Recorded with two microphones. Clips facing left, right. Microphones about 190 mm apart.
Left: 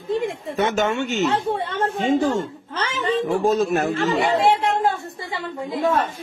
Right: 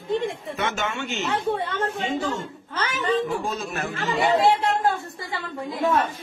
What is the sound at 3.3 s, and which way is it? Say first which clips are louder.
Speech: left 9 dB; 40° left (ahead or behind).